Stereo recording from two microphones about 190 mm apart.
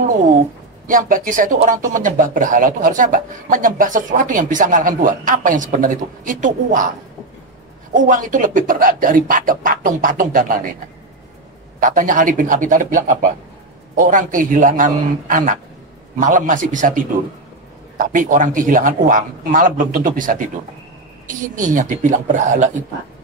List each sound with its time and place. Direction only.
0.8 s speech: 45° right (ahead or behind)
7.9 s speech: 45° right (ahead or behind)
11.8 s speech: 45° right (ahead or behind)